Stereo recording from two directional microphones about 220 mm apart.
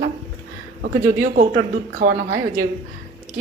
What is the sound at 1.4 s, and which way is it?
Speech, 40° right (ahead or behind).